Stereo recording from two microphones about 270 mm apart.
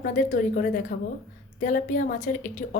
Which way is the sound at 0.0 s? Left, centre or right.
Left.